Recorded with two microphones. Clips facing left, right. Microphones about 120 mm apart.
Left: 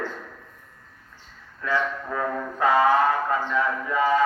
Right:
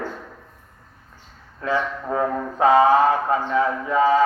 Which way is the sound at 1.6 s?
25° right (ahead or behind).